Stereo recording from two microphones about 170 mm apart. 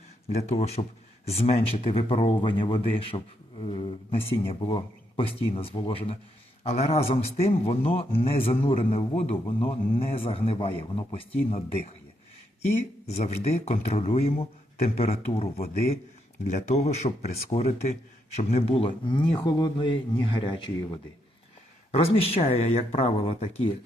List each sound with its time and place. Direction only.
0.3 s speech: 40° left (ahead or behind)
12.6 s speech: 40° left (ahead or behind)